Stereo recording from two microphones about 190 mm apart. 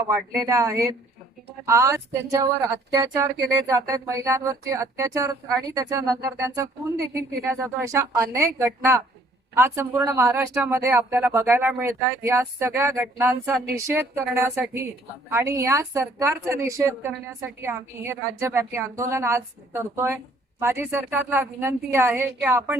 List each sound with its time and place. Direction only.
0.1 s a woman's voice: 15° right (ahead or behind)